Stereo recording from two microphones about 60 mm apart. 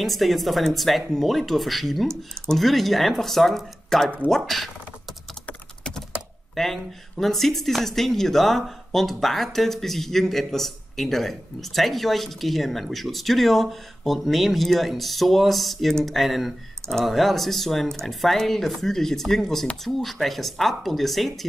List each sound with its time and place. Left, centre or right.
0.0 s speech: centre
4.5 s a sound: centre
5.9 s computer keyboard: centre
6.5 s speech: centre